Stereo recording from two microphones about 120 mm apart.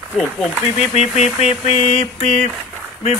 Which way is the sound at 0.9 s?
65° left (ahead or behind).